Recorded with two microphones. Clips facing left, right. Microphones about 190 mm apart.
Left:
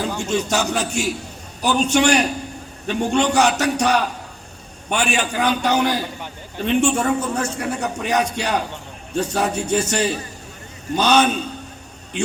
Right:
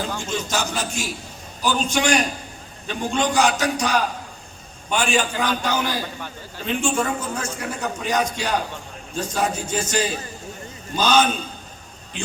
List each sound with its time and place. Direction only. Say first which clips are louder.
0.2 s a man's voice: left 5 dB; 65° left (ahead or behind)